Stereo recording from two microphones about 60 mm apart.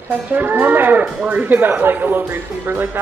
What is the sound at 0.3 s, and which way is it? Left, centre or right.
Speech, right.